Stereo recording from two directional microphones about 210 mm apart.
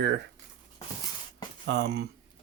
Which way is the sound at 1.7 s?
55° right (ahead or behind).